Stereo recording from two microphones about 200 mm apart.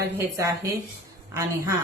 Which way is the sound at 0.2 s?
15° right (ahead or behind).